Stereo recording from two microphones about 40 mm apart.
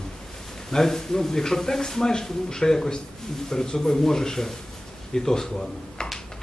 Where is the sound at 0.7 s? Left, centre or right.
Centre.